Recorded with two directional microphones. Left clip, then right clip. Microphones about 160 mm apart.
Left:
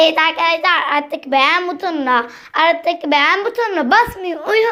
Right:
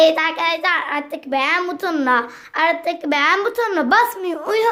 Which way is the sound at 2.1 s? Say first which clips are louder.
Left 3 dB; 5° right (ahead or behind).